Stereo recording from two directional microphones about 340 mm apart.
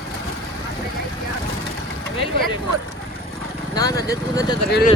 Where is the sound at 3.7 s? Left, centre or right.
Centre.